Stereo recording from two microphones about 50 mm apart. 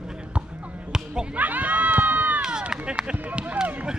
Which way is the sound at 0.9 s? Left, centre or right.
Centre.